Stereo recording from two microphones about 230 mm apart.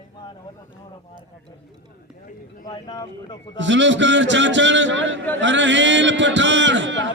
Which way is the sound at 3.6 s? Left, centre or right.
Right.